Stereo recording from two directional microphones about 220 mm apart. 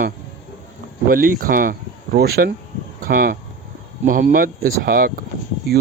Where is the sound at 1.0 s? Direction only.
40° right (ahead or behind).